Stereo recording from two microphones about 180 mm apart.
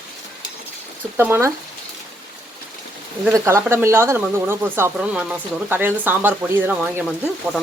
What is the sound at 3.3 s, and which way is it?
Speech, 15° right (ahead or behind).